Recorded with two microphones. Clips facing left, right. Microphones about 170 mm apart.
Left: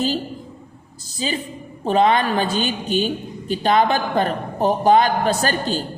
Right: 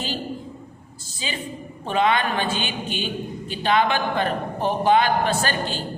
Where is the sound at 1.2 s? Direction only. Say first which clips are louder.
Left 5 dB; 40° left (ahead or behind).